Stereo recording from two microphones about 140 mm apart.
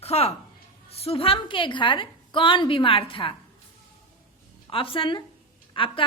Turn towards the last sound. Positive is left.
turn(degrees=40)  # may be behind; listen again after turning